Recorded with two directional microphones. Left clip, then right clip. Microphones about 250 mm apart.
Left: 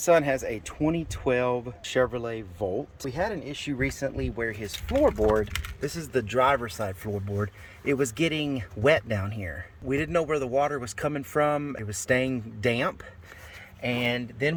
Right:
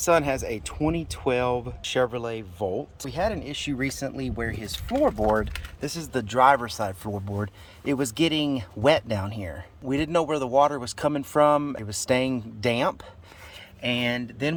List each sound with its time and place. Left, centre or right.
0.0 s speech: centre